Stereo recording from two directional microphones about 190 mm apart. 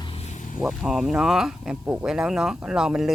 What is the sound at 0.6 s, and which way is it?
Speech, centre (ahead or behind).